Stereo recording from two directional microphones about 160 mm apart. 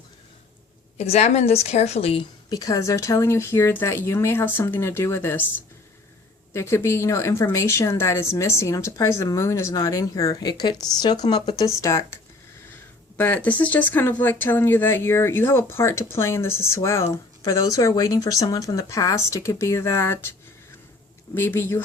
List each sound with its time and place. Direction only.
0.9 s a woman's voice: 40° left (ahead or behind)
2.5 s speech: 20° left (ahead or behind)
6.5 s speech: 15° left (ahead or behind)
21.3 s speech: 15° left (ahead or behind)